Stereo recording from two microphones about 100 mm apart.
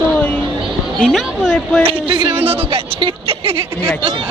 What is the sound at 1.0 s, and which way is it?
Speech, centre (ahead or behind).